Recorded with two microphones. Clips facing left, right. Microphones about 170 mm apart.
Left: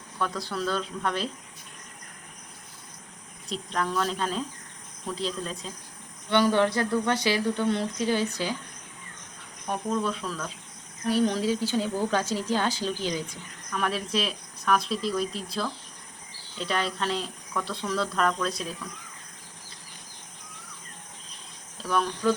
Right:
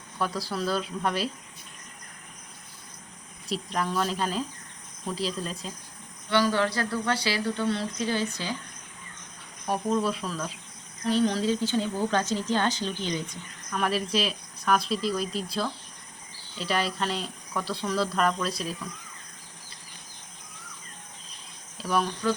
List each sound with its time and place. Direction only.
0.2 s speech: 5° right (ahead or behind)
3.5 s speech: 5° right (ahead or behind)
6.3 s speech: 20° left (ahead or behind)
9.6 s speech: 5° right (ahead or behind)
11.1 s speech: 10° left (ahead or behind); by 18.7 s 5° right (ahead or behind)
21.8 s insect: 10° right (ahead or behind)